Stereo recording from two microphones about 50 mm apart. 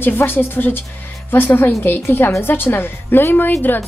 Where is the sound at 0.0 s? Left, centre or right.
Left.